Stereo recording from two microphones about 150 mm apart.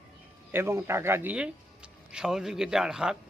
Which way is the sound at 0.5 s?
15° right (ahead or behind).